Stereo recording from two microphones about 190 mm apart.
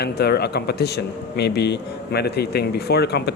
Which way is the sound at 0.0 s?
55° left (ahead or behind).